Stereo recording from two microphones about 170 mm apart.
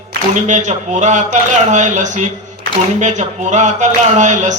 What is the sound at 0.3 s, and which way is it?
A man's voice, 45° right (ahead or behind).